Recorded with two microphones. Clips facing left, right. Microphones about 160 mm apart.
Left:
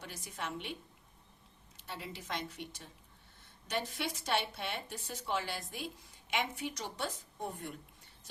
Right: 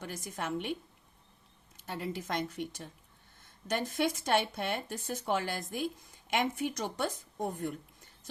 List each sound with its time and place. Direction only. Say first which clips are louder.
0.0 s speech: right 5 dB; 50° right (ahead or behind)
1.7 s speech: right 8 dB; 50° right (ahead or behind)